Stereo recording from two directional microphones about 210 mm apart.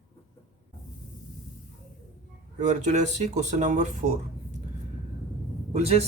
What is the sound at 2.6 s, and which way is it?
Speech, 35° right (ahead or behind).